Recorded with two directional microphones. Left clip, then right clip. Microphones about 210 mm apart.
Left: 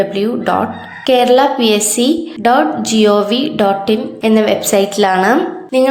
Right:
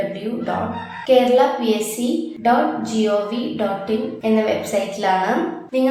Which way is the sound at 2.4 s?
45° left (ahead or behind).